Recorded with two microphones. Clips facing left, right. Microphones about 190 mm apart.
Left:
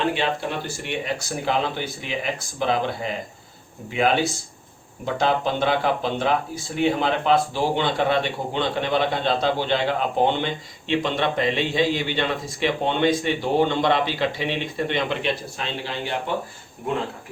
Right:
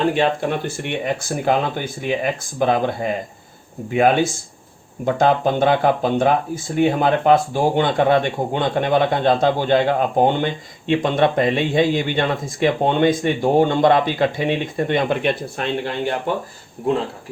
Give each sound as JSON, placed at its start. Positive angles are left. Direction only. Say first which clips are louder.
{"t": 0.8, "sound": "speech", "louder": "right 4 dB", "side_deg": -55}
{"t": 3.9, "sound": "speech", "louder": "right 5 dB", "side_deg": -50}